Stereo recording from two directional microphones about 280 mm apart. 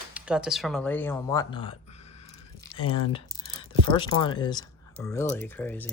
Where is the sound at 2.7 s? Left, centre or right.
Left.